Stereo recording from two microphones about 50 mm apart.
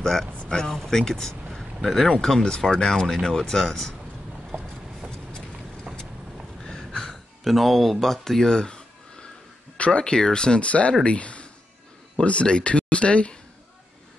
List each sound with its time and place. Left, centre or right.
0.0 s speech: centre
6.9 s a sound: centre
9.8 s speech: left